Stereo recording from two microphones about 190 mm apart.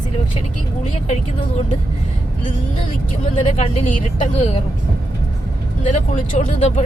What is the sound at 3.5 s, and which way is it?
Speech, 40° left (ahead or behind).